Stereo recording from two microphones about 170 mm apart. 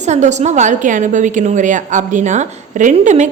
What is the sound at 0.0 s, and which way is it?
A woman's voice, 45° right (ahead or behind).